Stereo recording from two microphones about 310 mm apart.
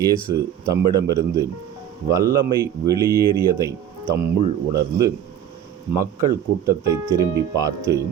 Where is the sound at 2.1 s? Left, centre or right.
Centre.